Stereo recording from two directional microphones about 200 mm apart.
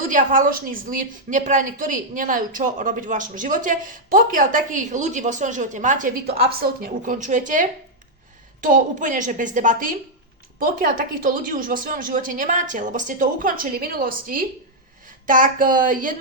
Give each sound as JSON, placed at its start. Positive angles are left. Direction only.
{"t": 0.1, "sound": "a woman's voice", "side_deg": -40}